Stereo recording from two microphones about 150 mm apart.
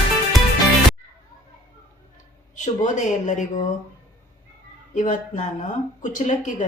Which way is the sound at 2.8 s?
55° left (ahead or behind).